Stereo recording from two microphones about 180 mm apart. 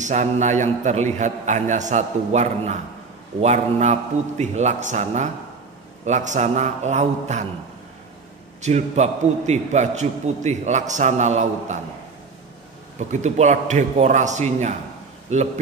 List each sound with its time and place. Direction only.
0.0 s a man's voice: 40° right (ahead or behind)
8.5 s a man's voice: 40° right (ahead or behind)
13.1 s a man's voice: 40° right (ahead or behind)